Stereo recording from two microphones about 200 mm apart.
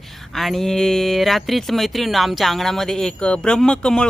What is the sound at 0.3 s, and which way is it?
Speech, centre (ahead or behind).